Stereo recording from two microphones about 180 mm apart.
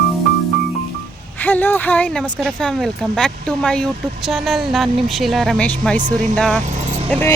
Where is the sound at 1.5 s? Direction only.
10° left (ahead or behind).